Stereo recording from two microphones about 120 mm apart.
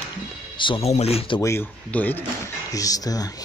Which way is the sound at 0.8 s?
60° left (ahead or behind).